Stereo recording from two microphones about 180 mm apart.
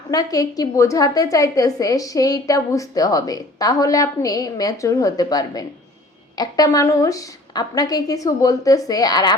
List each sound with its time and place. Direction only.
0.1 s a woman's voice: 20° left (ahead or behind)